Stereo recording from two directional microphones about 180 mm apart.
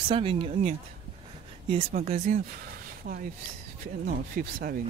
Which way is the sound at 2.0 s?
40° right (ahead or behind).